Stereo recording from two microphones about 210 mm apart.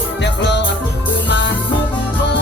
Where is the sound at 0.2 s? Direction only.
55° left (ahead or behind).